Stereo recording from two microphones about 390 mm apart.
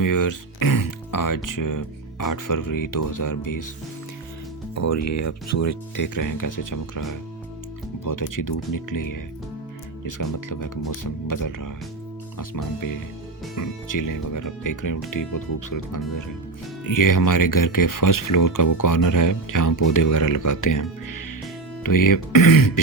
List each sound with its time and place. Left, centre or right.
0.0 s speech: left
4.7 s speech: left